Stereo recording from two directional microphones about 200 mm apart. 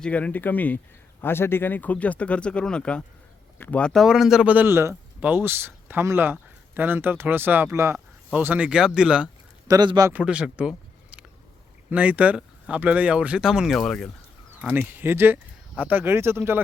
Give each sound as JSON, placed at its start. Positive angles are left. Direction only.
{"t": 0.0, "sound": "a man's voice", "side_deg": 5}
{"t": 9.6, "sound": "speech", "side_deg": -20}
{"t": 10.1, "sound": "speech", "side_deg": -5}
{"t": 14.6, "sound": "a man's voice", "side_deg": -10}